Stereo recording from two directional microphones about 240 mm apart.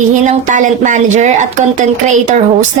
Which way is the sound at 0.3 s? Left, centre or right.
Right.